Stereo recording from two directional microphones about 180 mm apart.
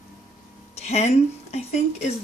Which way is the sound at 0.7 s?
35° left (ahead or behind).